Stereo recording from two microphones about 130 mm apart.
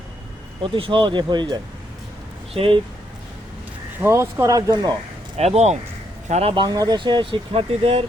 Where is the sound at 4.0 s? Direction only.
20° right (ahead or behind).